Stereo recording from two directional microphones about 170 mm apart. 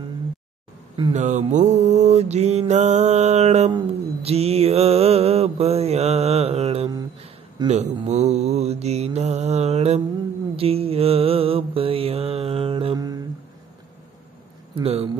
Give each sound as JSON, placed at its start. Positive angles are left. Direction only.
{"t": 1.1, "sound": "mantra", "side_deg": -45}
{"t": 14.8, "sound": "speech", "side_deg": -35}